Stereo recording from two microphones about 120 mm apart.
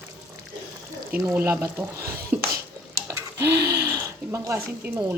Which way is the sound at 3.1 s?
20° right (ahead or behind).